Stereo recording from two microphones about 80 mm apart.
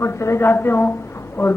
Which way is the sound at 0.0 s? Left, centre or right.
Left.